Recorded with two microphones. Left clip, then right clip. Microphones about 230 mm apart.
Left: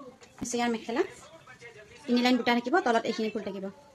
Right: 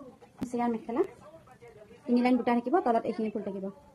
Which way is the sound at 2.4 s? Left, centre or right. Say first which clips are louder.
Left 1 dB; left.